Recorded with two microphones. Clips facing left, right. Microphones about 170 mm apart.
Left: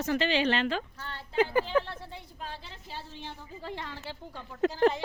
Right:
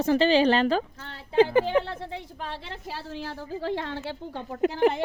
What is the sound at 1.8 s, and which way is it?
A woman's voice, 90° right.